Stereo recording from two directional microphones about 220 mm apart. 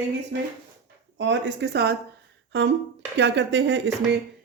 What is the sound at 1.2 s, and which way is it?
Speech, 50° right (ahead or behind).